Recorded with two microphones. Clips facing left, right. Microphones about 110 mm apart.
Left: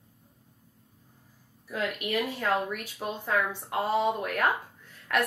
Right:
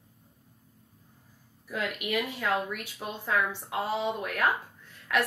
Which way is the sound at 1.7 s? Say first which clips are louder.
Left 1 dB; 35° left (ahead or behind).